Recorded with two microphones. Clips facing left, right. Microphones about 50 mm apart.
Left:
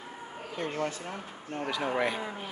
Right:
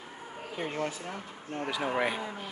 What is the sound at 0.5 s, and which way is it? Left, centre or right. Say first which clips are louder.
Speech: left 1 dB; centre.